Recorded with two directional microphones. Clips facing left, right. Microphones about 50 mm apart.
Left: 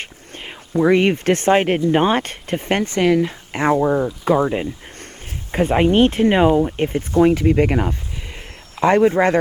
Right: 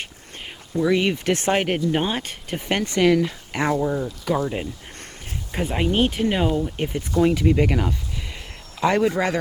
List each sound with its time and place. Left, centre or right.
0.3 s speech: left
1.5 s speech: centre
1.8 s speech: left
2.2 s speech: left
3.0 s speech: centre
9.0 s speech: left